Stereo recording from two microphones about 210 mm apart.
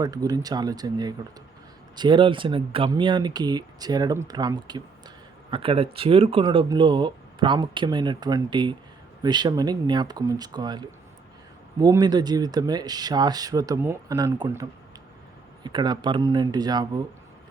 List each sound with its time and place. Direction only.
0.0 s speech: 15° right (ahead or behind)